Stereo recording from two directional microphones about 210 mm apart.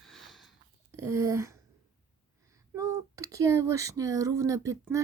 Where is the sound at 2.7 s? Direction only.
15° right (ahead or behind).